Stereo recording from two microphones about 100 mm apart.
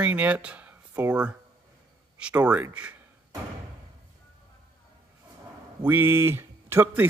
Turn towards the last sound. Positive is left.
turn(degrees=-20)  # may be behind; listen again after turning